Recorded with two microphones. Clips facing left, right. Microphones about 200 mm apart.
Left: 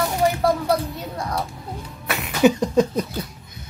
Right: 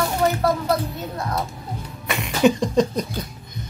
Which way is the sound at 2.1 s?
5° left (ahead or behind).